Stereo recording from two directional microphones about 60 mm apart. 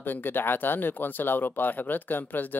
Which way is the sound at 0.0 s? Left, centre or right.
Left.